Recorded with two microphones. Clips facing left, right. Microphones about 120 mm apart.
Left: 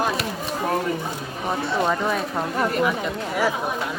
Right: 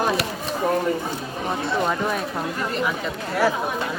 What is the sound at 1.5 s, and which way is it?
Speech, centre (ahead or behind).